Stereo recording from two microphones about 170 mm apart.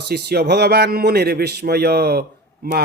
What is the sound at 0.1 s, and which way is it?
A man's voice, 70° right (ahead or behind).